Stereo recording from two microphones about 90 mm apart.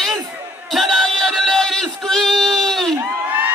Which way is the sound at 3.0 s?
20° right (ahead or behind).